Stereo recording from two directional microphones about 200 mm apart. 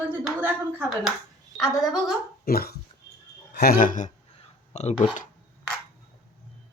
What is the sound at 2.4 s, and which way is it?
Speech, 50° left (ahead or behind).